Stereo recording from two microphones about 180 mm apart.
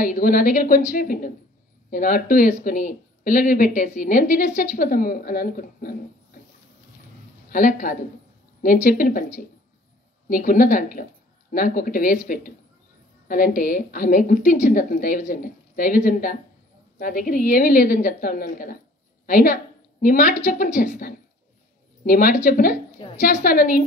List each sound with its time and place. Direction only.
0.0 s a woman's voice: 50° left (ahead or behind)
7.4 s a woman's voice: 50° left (ahead or behind)
10.2 s a woman's voice: 50° left (ahead or behind)
13.3 s a woman's voice: 50° left (ahead or behind)
22.0 s a woman's voice: 50° left (ahead or behind)